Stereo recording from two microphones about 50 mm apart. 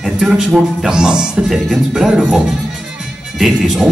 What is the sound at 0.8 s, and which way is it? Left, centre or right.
A man's voice, centre.